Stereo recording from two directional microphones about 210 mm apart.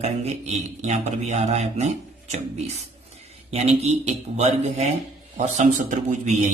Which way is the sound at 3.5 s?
30° right (ahead or behind).